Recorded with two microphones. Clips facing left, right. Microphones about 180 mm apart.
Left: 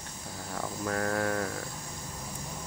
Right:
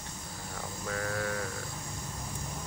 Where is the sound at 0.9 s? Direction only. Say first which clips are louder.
Left 4 dB; 50° left (ahead or behind).